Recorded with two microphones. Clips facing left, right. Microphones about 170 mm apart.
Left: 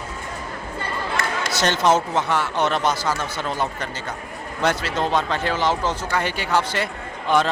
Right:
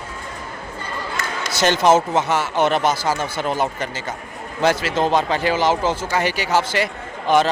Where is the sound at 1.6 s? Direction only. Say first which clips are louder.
Right 4 dB; 5° right (ahead or behind).